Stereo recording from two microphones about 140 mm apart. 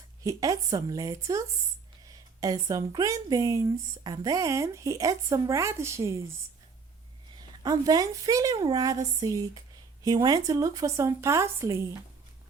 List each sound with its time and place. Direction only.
0.2 s speech: 25° right (ahead or behind)
7.3 s speech: 25° right (ahead or behind)